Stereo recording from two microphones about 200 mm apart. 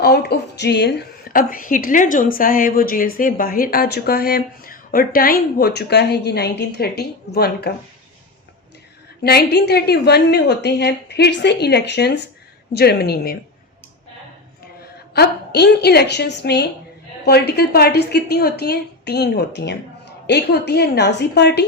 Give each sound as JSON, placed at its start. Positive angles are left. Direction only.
{"t": 0.0, "sound": "speech", "side_deg": 50}
{"t": 9.2, "sound": "a woman's voice", "side_deg": 55}
{"t": 15.1, "sound": "a woman's voice", "side_deg": 55}